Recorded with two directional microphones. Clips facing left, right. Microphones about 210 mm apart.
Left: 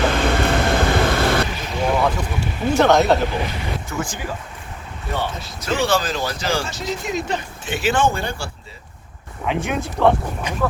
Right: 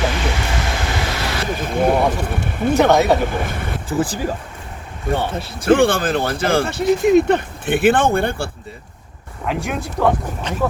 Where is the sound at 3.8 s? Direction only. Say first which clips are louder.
Right 7 dB; 30° right (ahead or behind).